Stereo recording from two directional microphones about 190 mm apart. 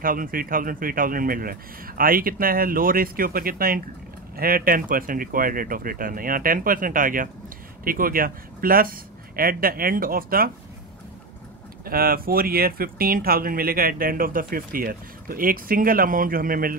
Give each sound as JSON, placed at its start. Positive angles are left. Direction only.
{"t": 0.0, "sound": "speech", "side_deg": -45}
{"t": 11.8, "sound": "speech", "side_deg": -50}